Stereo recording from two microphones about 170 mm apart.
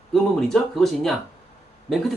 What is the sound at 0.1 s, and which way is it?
Speech, centre (ahead or behind).